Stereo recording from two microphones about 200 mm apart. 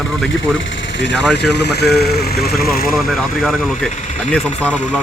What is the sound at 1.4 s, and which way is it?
Speech, 60° left (ahead or behind).